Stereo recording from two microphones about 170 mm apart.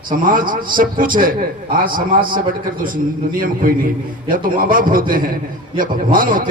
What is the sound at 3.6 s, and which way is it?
A man's voice, 55° right (ahead or behind).